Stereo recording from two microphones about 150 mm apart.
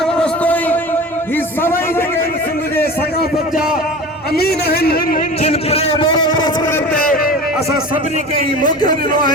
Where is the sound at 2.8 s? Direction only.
90° left.